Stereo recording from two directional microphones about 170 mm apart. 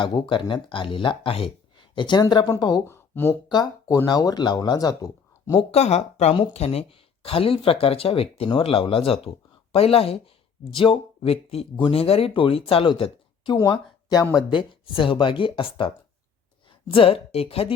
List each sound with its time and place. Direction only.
0.0 s speech: 25° left (ahead or behind)
2.8 s speech: 15° left (ahead or behind)
5.7 s speech: 40° left (ahead or behind)
16.9 s speech: 35° left (ahead or behind)